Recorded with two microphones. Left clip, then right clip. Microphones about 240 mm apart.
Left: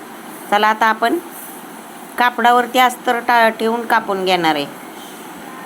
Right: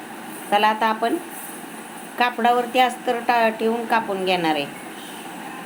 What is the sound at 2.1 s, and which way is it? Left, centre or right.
A woman's voice, centre.